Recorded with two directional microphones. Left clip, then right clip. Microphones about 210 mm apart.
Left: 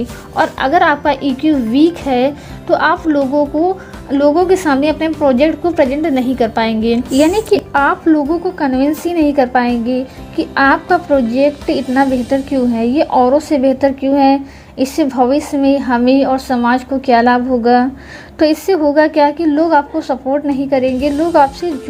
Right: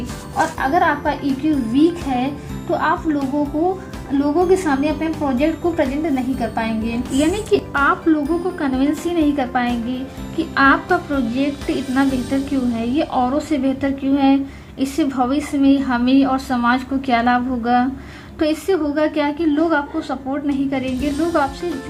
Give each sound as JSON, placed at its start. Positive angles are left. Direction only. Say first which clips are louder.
{"t": 0.3, "sound": "a woman's voice", "louder": "left 5 dB", "side_deg": 45}